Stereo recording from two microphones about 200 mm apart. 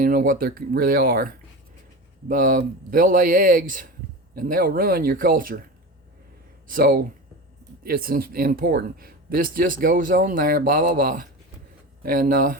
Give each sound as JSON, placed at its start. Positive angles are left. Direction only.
{"t": 0.0, "sound": "speech", "side_deg": -45}
{"t": 6.7, "sound": "speech", "side_deg": -45}